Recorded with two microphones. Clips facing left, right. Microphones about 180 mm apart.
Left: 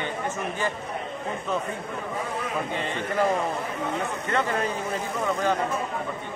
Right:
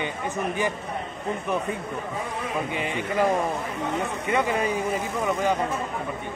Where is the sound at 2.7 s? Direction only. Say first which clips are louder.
Right 1 dB; 15° right (ahead or behind).